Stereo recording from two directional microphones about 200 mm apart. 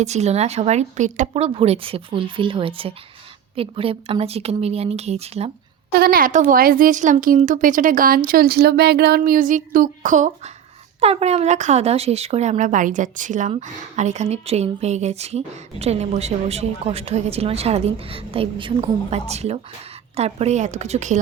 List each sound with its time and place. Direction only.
0.0 s speech: 35° right (ahead or behind)
5.9 s speech: 50° right (ahead or behind)